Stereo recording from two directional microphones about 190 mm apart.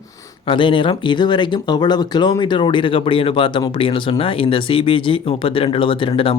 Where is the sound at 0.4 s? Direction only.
25° left (ahead or behind).